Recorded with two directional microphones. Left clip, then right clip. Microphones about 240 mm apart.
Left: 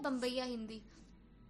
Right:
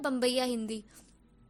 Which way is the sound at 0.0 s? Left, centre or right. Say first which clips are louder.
Right 8 dB; right.